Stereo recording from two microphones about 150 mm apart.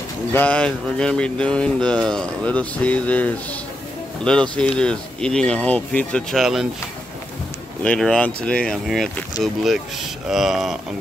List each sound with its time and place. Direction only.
0.3 s speech: 10° left (ahead or behind)
7.8 s speech: 5° left (ahead or behind)